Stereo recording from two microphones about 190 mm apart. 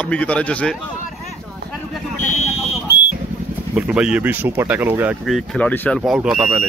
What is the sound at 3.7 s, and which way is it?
Speech, 5° right (ahead or behind).